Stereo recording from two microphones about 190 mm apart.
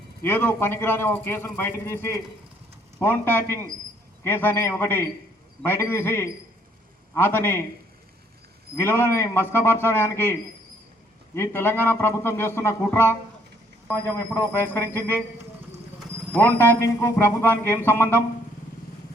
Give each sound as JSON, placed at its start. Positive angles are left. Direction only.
{"t": 0.2, "sound": "a man's voice", "side_deg": 10}
{"t": 8.7, "sound": "a man's voice", "side_deg": 10}
{"t": 11.3, "sound": "a man's voice", "side_deg": 10}
{"t": 14.5, "sound": "a man's voice", "side_deg": 10}
{"t": 16.3, "sound": "a man's voice", "side_deg": 10}